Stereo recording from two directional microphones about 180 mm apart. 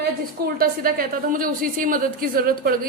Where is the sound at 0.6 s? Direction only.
55° right (ahead or behind).